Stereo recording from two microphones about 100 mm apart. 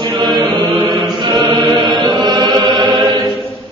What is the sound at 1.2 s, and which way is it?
Chant, 50° right (ahead or behind).